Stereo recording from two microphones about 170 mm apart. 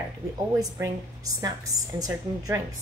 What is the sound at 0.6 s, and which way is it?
A woman's voice, 20° right (ahead or behind).